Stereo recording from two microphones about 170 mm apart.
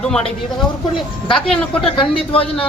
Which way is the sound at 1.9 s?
30° left (ahead or behind).